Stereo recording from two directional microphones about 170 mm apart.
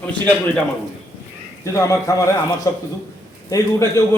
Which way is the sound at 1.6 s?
20° left (ahead or behind).